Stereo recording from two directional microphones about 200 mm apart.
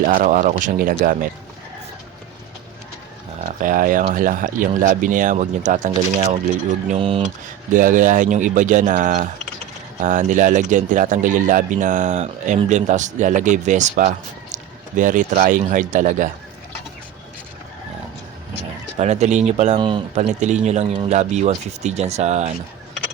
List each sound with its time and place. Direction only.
0.0 s speech: 40° right (ahead or behind)
3.6 s speech: 45° right (ahead or behind); by 7.3 s 30° right (ahead or behind)
7.7 s speech: 40° right (ahead or behind)
18.9 s speech: 35° right (ahead or behind)